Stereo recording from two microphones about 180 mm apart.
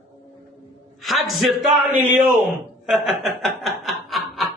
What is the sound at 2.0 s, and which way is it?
Speech, 10° right (ahead or behind).